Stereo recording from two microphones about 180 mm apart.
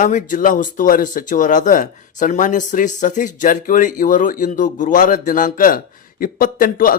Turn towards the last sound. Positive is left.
turn(degrees=50)  # may be behind; listen again after turning